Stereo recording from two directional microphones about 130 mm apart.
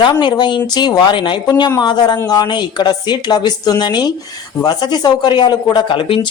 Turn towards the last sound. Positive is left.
turn(degrees=40)  # may be behind; listen again after turning